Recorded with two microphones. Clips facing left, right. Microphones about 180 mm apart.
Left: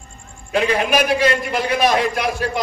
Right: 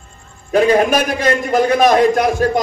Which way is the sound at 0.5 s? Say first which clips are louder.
Right 6 dB; 45° right (ahead or behind).